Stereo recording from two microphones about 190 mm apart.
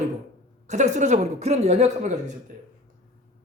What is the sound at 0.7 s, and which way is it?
Speech, 40° right (ahead or behind).